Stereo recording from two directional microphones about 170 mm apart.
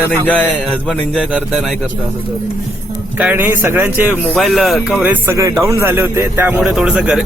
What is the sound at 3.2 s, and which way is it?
Speech, 10° right (ahead or behind).